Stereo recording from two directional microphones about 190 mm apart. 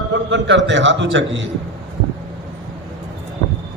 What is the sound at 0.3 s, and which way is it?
A man's voice, 70° right (ahead or behind).